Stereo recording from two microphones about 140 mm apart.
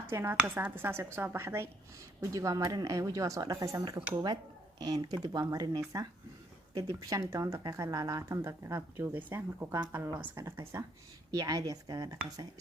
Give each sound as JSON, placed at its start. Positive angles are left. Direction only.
{"t": 0.1, "sound": "speech", "side_deg": -15}